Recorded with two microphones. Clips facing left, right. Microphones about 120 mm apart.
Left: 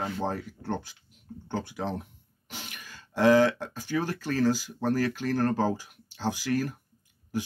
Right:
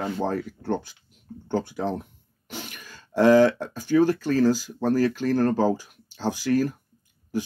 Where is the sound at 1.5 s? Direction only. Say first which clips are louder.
Right 6 dB; 35° right (ahead or behind).